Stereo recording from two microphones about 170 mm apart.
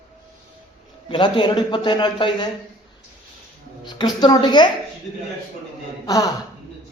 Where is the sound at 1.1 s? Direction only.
25° left (ahead or behind).